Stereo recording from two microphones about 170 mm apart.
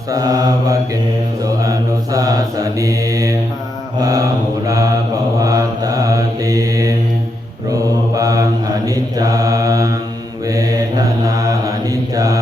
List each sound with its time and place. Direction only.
0.1 s mantra: 20° right (ahead or behind)